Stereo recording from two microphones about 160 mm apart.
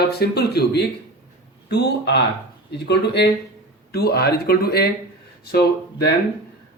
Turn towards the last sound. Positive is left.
turn(degrees=80)